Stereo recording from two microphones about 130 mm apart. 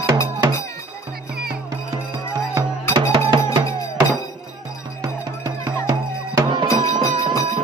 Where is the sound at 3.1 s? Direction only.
40° right (ahead or behind).